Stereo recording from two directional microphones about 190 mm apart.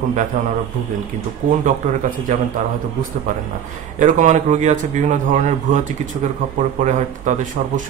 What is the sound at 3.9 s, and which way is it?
Speech, 40° right (ahead or behind).